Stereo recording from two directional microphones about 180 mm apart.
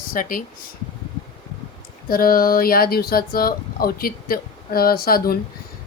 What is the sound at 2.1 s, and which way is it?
Speech, 55° left (ahead or behind).